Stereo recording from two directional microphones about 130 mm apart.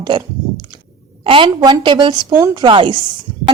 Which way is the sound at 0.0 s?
35° right (ahead or behind).